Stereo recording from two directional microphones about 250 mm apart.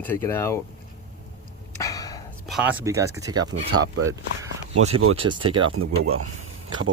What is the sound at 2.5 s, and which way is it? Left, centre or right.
Speech, centre.